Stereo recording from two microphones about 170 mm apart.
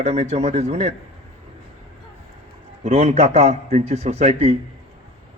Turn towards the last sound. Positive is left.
turn(degrees=-40)  # may be behind; listen again after turning